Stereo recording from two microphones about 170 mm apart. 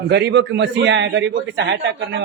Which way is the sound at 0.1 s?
90° right.